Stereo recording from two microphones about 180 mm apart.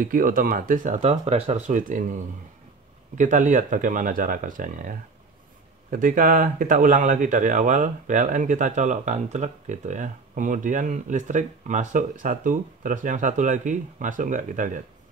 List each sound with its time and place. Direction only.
0.0 s speech: 50° right (ahead or behind)